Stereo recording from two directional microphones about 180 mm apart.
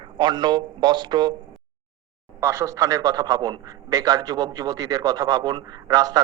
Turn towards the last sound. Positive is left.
turn(degrees=-20)  # may be behind; listen again after turning